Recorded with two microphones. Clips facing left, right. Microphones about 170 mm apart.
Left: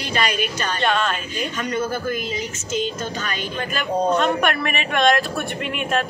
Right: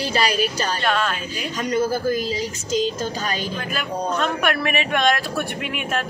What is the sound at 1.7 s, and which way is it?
A woman's voice, 35° right (ahead or behind).